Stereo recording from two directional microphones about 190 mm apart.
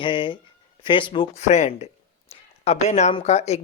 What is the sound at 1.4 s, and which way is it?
Speech, 35° left (ahead or behind).